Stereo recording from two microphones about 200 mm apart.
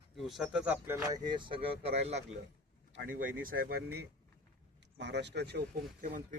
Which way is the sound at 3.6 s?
50° right (ahead or behind).